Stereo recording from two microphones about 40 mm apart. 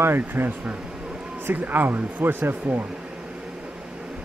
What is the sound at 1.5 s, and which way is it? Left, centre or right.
Speech, right.